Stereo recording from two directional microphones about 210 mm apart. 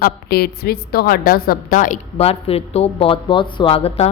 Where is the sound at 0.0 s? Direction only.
50° left (ahead or behind).